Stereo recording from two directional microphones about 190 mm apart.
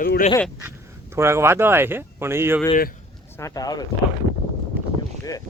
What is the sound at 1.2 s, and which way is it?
Speech, 15° right (ahead or behind).